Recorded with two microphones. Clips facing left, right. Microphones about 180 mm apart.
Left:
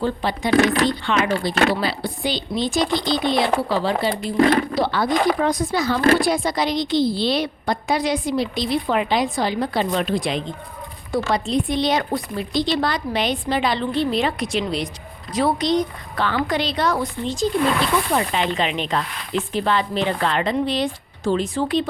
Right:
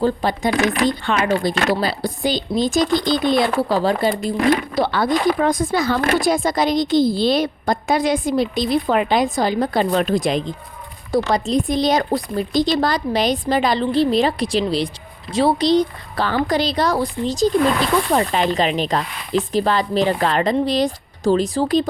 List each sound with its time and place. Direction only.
0.0 s speech: 45° right (ahead or behind)
4.7 s a woman's voice: 55° right (ahead or behind); by 21.8 s 40° right (ahead or behind)